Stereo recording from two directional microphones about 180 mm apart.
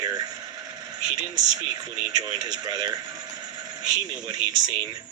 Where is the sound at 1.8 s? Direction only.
20° right (ahead or behind).